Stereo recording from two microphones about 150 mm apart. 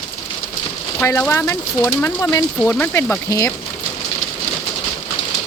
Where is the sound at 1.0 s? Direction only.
15° left (ahead or behind).